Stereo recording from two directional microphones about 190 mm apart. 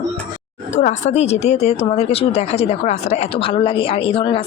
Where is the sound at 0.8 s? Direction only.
40° left (ahead or behind).